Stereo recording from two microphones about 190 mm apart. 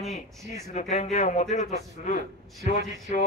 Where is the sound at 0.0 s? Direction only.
Centre (ahead or behind).